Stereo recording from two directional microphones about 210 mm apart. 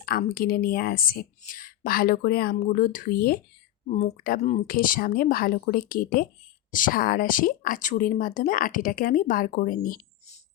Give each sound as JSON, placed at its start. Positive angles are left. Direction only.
{"t": 0.0, "sound": "speech", "side_deg": 45}
{"t": 3.8, "sound": "speech", "side_deg": 35}